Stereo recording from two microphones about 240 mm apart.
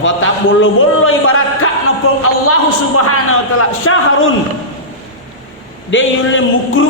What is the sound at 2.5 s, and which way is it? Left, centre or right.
A man's voice, left.